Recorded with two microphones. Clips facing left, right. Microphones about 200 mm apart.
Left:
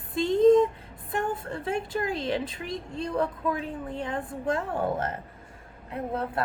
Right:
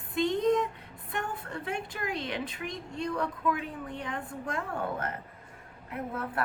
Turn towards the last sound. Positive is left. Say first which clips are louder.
# left 4 dB
turn(degrees=25)  # may be behind; listen again after turning